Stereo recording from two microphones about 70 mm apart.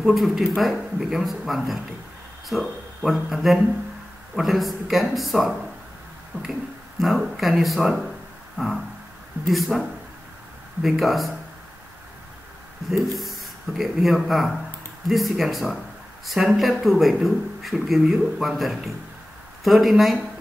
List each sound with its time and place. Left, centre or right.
0.0 s speech: centre
6.3 s finger snapping: right
7.0 s speech: centre
9.5 s speech: centre
13.0 s speech: centre